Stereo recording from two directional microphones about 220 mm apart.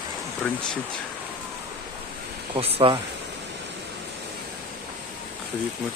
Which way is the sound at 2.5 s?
25° right (ahead or behind).